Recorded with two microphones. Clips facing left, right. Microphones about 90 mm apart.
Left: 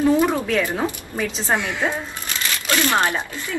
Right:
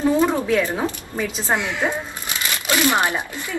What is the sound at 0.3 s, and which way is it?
Speech, 15° right (ahead or behind).